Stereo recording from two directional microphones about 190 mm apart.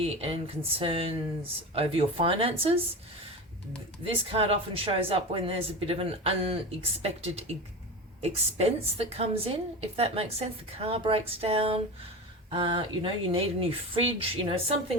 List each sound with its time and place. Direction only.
0.0 s a woman's voice: 30° right (ahead or behind)
4.0 s a woman's voice: 30° right (ahead or behind)